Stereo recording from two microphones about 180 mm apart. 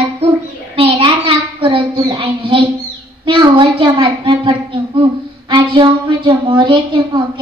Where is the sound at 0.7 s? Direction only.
30° right (ahead or behind).